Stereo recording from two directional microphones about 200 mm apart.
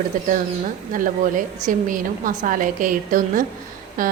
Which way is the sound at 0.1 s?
40° right (ahead or behind).